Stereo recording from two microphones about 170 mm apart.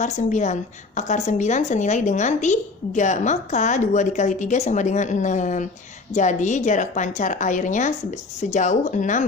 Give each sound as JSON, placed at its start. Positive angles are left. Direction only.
{"t": 0.0, "sound": "a woman's voice", "side_deg": 45}